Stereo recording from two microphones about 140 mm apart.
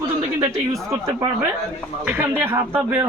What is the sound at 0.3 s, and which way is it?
Speech, 25° right (ahead or behind).